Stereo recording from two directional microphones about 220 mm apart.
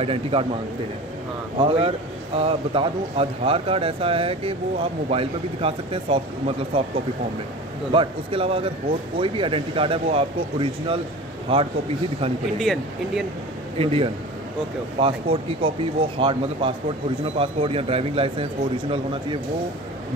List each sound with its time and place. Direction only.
0.0 s a man's voice: 25° right (ahead or behind)
1.7 s a man's voice: 25° right (ahead or behind)
7.9 s a man's voice: 25° right (ahead or behind)
12.5 s speech: centre (ahead or behind)
13.7 s a man's voice: 25° right (ahead or behind)